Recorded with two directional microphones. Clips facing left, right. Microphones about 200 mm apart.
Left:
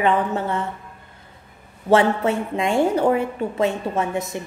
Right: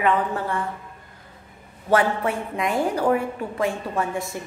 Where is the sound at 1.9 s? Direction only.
25° left (ahead or behind).